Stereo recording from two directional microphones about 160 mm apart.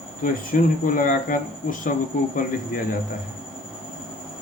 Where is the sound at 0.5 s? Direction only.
60° left (ahead or behind).